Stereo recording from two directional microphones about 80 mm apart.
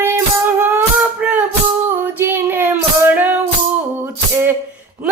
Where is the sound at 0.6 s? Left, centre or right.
Right.